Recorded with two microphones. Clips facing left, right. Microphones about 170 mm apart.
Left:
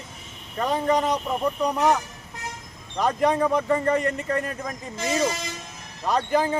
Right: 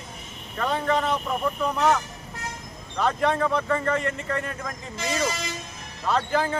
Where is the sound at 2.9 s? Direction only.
15° left (ahead or behind).